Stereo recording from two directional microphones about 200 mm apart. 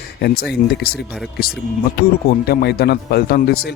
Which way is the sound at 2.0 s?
50° left (ahead or behind).